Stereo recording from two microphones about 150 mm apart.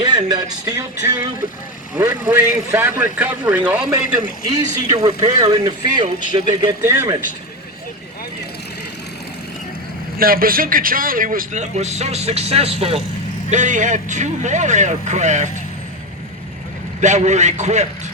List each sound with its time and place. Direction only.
0.0 s speech: 25° right (ahead or behind)
2.3 s a man's voice: 15° right (ahead or behind)
4.9 s speech: 25° right (ahead or behind)
10.2 s a man's voice: 75° right (ahead or behind); by 13.0 s 40° right (ahead or behind)
13.5 s speech: 55° right (ahead or behind)
17.0 s speech: 50° right (ahead or behind)